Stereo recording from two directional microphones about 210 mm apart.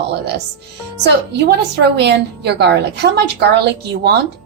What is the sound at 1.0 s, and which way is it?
A woman's voice, 55° right (ahead or behind).